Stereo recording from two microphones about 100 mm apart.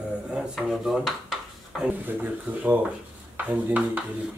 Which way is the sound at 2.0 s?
15° right (ahead or behind).